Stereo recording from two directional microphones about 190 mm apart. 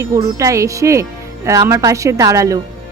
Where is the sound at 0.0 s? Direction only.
15° right (ahead or behind).